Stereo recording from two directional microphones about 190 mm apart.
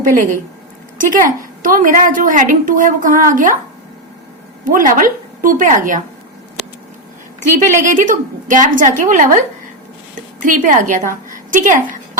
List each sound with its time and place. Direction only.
0.0 s a woman's voice: 45° right (ahead or behind)
4.6 s a woman's voice: 45° right (ahead or behind)
7.3 s a woman's voice: 40° right (ahead or behind)